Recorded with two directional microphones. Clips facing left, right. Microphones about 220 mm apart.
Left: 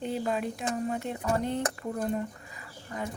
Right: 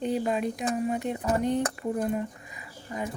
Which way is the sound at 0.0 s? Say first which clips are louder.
Right 3 dB; 20° right (ahead or behind).